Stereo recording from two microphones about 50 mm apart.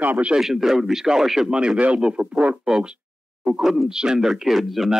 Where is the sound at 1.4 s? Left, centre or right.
Right.